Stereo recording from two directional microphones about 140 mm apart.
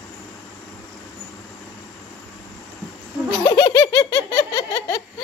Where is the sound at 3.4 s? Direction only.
30° left (ahead or behind).